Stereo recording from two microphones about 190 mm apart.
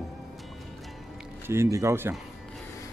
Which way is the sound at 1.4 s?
15° right (ahead or behind).